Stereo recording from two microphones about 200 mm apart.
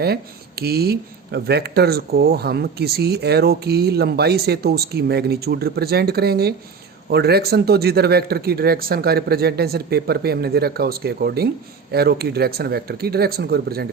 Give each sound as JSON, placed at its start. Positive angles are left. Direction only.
{"t": 0.0, "sound": "speech", "side_deg": -50}